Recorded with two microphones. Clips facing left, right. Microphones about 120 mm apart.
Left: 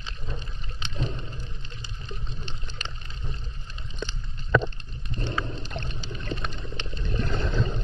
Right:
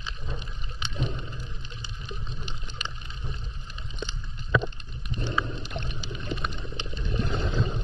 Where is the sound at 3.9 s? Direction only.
15° right (ahead or behind).